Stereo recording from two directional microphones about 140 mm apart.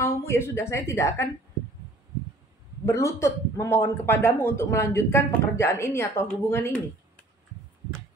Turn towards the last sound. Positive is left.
turn(degrees=15)  # may be behind; listen again after turning